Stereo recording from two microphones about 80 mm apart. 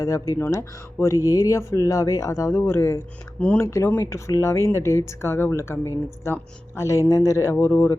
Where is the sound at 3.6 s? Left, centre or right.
Left.